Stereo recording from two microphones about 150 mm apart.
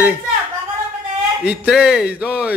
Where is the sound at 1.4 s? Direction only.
5° right (ahead or behind).